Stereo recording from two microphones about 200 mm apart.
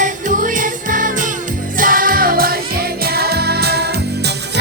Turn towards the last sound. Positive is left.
turn(degrees=-55)  # may be behind; listen again after turning